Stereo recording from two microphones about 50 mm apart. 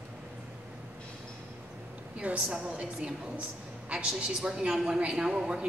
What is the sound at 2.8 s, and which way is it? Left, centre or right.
A woman's voice, centre.